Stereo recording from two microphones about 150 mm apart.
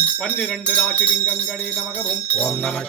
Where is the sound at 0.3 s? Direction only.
10° left (ahead or behind).